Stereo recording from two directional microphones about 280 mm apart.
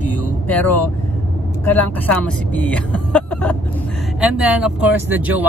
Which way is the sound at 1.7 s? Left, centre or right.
Centre.